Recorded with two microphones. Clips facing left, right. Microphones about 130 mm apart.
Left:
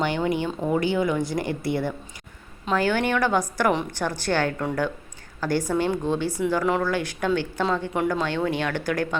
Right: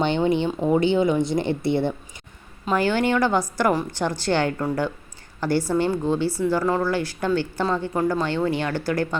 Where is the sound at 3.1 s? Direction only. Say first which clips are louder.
Right 2 dB; 15° right (ahead or behind).